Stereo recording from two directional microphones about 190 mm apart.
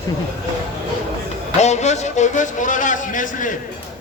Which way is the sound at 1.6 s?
35° left (ahead or behind).